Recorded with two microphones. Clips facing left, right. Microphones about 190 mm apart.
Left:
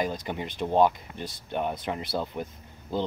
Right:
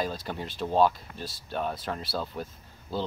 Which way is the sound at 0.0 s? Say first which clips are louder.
Left 2 dB; 20° left (ahead or behind).